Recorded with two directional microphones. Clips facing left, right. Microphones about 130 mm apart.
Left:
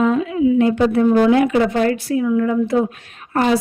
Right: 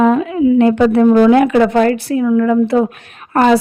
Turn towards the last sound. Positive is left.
turn(degrees=-65)  # may be behind; listen again after turning